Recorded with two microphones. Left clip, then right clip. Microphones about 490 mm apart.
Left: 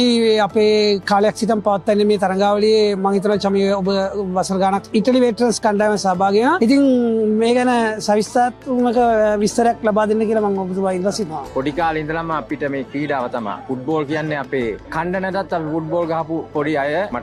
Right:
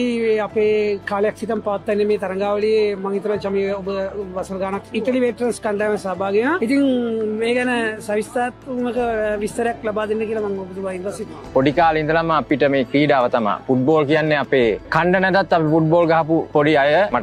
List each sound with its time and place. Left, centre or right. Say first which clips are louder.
0.0 s speech: left 4 dB; left
11.8 s speech: right 3 dB; right